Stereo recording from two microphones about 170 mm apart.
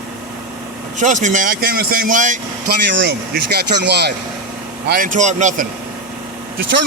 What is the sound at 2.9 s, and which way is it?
Speech, 90° right.